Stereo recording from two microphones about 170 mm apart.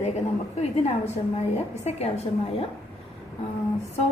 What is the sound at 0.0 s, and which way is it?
A woman's voice, 40° left (ahead or behind).